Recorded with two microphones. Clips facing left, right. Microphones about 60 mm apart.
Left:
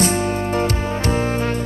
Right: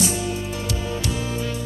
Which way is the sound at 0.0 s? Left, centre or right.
Left.